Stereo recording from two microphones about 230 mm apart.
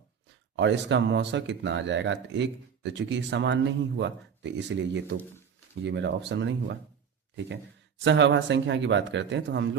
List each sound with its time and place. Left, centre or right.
0.5 s speech: right